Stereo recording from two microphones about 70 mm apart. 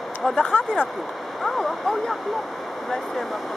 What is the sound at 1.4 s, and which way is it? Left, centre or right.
Speech, centre.